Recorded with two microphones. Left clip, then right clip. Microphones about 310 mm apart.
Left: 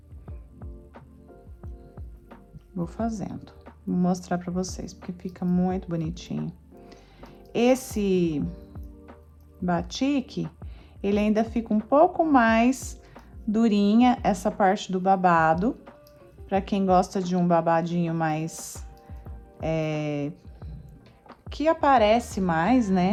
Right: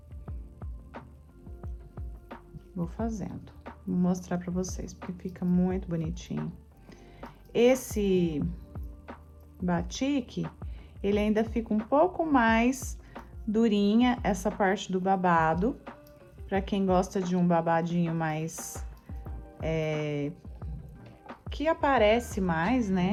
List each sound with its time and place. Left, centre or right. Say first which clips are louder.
0.3 s music: left 2 dB; centre
2.9 s speech: left 5 dB; centre
7.5 s speech: left 1 dB; centre
9.6 s speech: left 4 dB; centre
19.5 s speech: left 3 dB; centre
21.5 s speech: left 5 dB; centre